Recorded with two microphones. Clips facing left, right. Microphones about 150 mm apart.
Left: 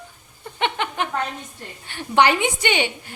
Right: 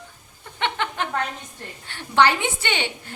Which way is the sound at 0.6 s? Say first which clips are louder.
Left 2 dB; 15° left (ahead or behind).